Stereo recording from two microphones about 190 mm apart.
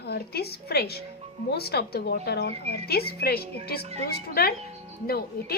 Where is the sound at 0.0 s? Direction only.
55° left (ahead or behind).